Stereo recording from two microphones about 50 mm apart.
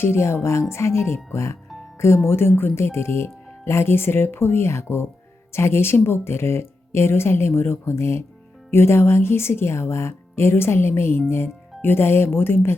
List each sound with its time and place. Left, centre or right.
0.0 s speech: left